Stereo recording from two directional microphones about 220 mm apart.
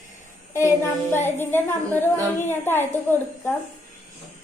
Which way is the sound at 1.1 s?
10° left (ahead or behind).